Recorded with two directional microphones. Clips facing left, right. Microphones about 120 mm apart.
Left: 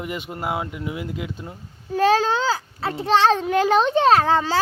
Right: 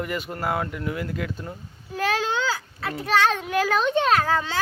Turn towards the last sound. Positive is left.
turn(degrees=30)  # may be behind; listen again after turning